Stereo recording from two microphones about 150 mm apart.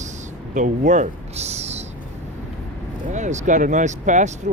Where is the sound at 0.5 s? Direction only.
55° right (ahead or behind).